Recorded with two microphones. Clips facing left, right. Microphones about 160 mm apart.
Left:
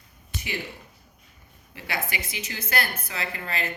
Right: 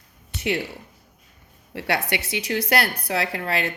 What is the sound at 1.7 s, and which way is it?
A woman's voice, 70° right (ahead or behind).